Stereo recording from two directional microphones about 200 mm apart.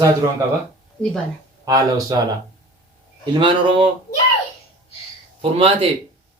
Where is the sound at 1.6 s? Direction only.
15° right (ahead or behind).